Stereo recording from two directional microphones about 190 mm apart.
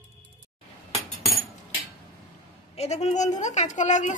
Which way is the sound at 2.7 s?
35° left (ahead or behind).